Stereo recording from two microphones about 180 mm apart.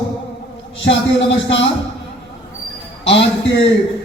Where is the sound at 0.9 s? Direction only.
85° left.